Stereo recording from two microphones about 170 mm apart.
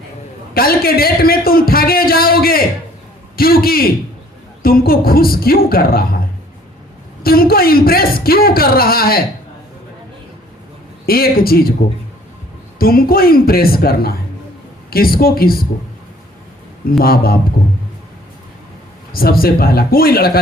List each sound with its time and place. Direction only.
0.5 s a man's voice: 60° left (ahead or behind)
11.0 s a man's voice: 60° left (ahead or behind)
12.8 s a man's voice: 60° left (ahead or behind)
17.0 s a man's voice: 60° left (ahead or behind)
19.1 s a man's voice: 60° left (ahead or behind)